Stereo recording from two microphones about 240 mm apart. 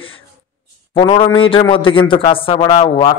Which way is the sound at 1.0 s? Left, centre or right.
Left.